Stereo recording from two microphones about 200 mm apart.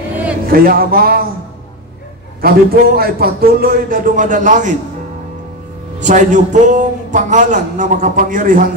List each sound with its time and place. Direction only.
0.5 s a man's voice: 45° right (ahead or behind)
2.4 s a man's voice: 50° right (ahead or behind)
5.9 s a man's voice: 40° right (ahead or behind)